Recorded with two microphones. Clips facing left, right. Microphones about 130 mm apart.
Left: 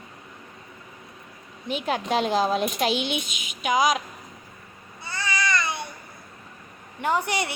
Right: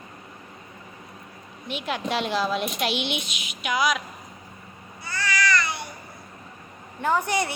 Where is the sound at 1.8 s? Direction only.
40° left (ahead or behind).